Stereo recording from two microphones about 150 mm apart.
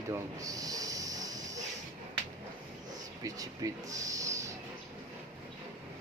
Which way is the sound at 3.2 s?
25° right (ahead or behind).